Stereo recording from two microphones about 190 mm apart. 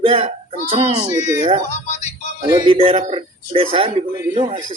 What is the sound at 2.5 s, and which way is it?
Speech, 25° right (ahead or behind).